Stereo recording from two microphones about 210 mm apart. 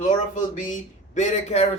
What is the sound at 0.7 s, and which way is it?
Speech, 35° left (ahead or behind).